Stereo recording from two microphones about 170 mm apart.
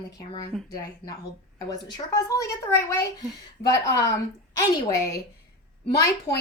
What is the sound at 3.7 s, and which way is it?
Speech, 75° left (ahead or behind).